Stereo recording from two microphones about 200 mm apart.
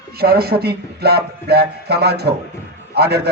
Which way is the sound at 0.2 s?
50° right (ahead or behind).